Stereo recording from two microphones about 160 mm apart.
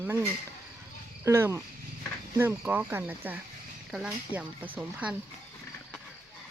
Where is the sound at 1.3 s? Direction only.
15° right (ahead or behind).